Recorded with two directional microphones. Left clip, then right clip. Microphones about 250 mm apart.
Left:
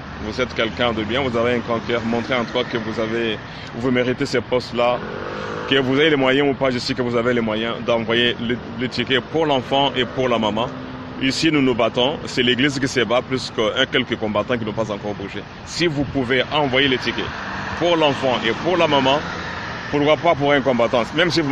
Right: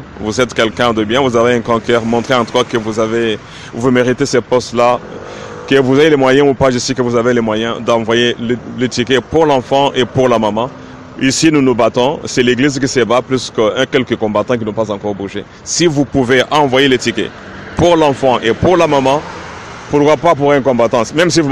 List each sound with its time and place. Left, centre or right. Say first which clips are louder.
0.3 s speech: right 9 dB; right